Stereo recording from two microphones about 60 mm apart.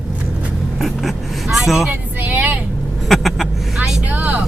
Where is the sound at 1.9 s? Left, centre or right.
Right.